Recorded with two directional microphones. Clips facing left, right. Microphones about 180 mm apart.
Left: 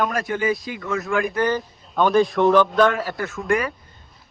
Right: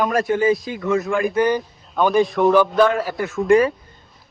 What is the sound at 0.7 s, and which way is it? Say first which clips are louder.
Speech: right 3 dB; 30° right (ahead or behind).